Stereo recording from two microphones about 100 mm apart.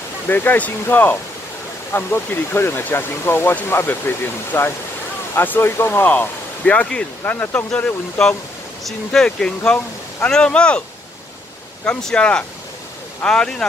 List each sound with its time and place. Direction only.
0.3 s speech: 20° left (ahead or behind)
11.8 s speech: 10° left (ahead or behind)